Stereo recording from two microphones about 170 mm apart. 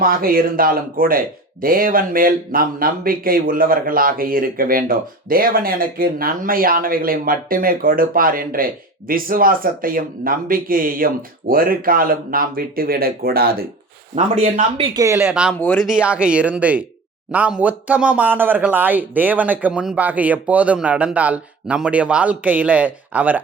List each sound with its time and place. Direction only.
0.0 s speech: 55° right (ahead or behind)
14.9 s speech: 15° right (ahead or behind)
15.5 s speech: 10° left (ahead or behind)
15.8 s speech: 5° right (ahead or behind)